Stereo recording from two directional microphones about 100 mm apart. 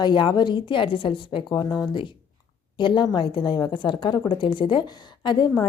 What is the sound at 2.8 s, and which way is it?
A woman's voice, 50° left (ahead or behind).